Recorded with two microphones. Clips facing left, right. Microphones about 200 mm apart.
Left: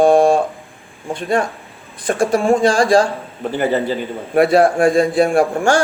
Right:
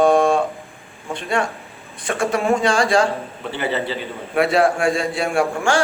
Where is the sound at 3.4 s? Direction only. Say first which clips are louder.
Left 6 dB; 45° left (ahead or behind).